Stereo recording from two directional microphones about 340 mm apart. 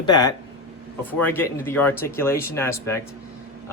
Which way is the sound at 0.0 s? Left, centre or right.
Centre.